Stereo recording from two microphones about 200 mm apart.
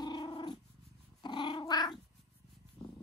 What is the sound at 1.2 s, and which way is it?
Dog, 20° left (ahead or behind).